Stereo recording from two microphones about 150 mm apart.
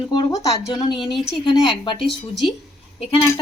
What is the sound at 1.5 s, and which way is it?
Speech, 35° left (ahead or behind).